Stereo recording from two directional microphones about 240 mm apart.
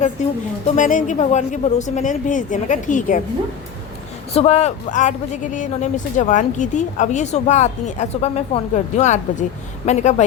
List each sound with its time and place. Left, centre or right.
0.2 s speech: left
4.4 s speech: left